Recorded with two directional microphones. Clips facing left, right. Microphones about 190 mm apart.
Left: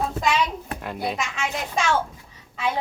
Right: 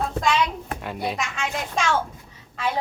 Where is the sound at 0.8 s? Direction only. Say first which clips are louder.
Even; centre (ahead or behind).